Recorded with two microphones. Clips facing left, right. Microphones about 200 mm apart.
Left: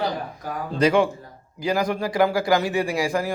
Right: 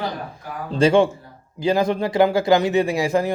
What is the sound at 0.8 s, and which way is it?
A man's voice, 25° right (ahead or behind).